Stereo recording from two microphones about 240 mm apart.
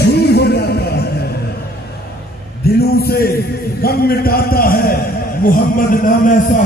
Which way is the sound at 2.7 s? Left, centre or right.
Left.